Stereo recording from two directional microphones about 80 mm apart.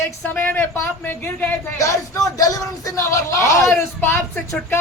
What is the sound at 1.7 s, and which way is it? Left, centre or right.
A woman's voice, left.